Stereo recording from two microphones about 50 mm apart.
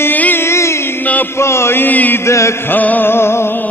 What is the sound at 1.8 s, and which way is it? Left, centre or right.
Chant, left.